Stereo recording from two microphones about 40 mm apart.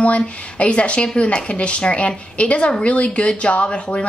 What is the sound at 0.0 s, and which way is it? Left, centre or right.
A woman's voice, left.